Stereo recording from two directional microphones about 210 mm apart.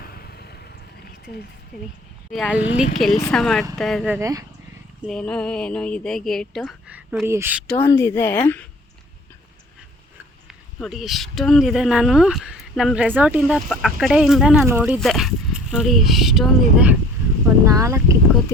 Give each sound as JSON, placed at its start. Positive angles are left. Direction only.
{"t": 0.0, "sound": "vehicle", "side_deg": 45}
{"t": 1.2, "sound": "speech", "side_deg": 45}
{"t": 2.3, "sound": "speech", "side_deg": 5}
{"t": 5.0, "sound": "speech", "side_deg": 5}
{"t": 7.7, "sound": "speech", "side_deg": 10}
{"t": 10.8, "sound": "speech", "side_deg": 0}